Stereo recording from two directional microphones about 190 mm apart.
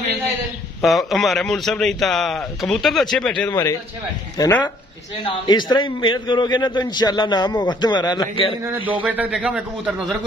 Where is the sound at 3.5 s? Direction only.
15° left (ahead or behind).